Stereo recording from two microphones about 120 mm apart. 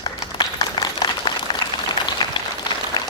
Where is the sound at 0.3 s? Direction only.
40° left (ahead or behind).